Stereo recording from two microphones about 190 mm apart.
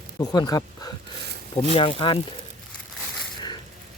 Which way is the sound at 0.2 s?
20° left (ahead or behind).